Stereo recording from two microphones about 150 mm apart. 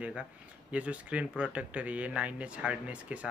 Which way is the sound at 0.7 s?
10° right (ahead or behind).